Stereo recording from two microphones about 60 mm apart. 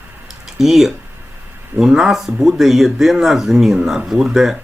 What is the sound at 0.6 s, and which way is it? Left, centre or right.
Speech, centre.